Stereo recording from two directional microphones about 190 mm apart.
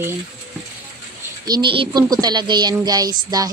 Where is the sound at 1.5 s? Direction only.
25° right (ahead or behind).